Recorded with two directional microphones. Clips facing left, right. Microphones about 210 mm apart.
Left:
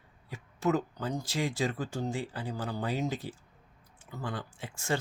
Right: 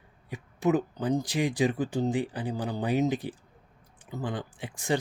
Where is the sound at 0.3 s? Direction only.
15° right (ahead or behind).